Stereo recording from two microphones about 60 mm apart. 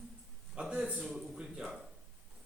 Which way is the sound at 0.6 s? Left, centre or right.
Centre.